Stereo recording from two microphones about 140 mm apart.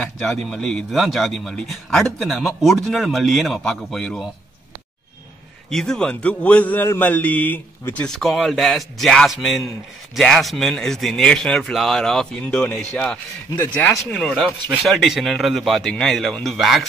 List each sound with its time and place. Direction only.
0.0 s a man's voice: centre (ahead or behind)
5.7 s a man's voice: 5° left (ahead or behind)